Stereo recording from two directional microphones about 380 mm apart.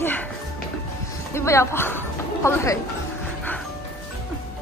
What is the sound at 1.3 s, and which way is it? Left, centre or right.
Speech, centre.